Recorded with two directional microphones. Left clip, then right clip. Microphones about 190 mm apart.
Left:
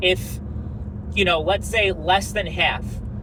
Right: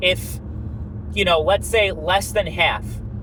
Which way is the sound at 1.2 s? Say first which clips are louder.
Right 5 dB; 30° right (ahead or behind).